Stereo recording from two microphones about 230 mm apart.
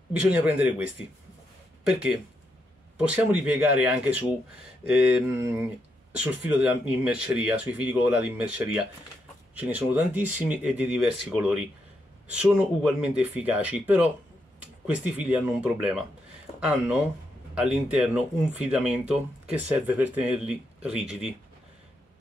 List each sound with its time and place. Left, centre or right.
0.1 s speech: centre
1.9 s speech: centre